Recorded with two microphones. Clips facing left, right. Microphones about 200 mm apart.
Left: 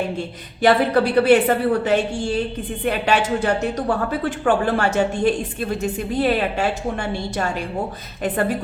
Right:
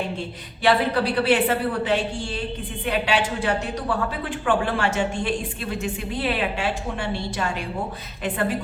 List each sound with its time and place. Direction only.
0.6 s a woman's voice: 45° left (ahead or behind)